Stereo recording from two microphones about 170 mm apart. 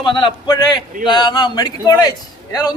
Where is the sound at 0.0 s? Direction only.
30° left (ahead or behind).